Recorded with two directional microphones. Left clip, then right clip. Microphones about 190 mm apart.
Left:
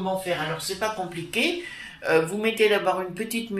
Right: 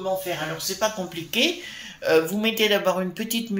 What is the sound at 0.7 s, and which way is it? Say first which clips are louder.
Speech: right 2 dB; 45° right (ahead or behind).